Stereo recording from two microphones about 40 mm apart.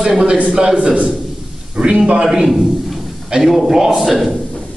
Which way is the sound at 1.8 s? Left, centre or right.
Right.